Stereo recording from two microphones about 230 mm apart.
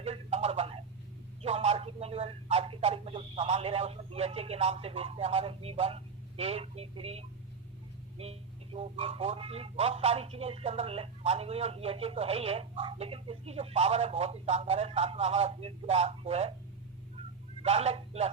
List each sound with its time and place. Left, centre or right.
0.0 s telephone: right
1.4 s speech: right
17.6 s a man's voice: right